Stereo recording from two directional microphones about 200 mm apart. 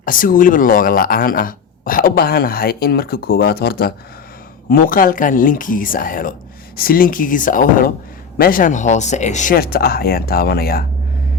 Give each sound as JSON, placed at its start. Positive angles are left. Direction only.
{"t": 0.0, "sound": "speech", "side_deg": 45}